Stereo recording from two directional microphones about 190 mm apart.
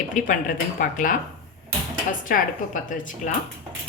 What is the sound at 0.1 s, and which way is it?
A woman's voice, 45° left (ahead or behind).